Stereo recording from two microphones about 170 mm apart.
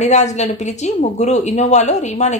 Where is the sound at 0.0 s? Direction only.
45° left (ahead or behind).